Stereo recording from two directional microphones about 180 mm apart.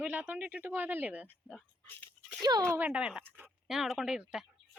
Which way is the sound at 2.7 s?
10° right (ahead or behind).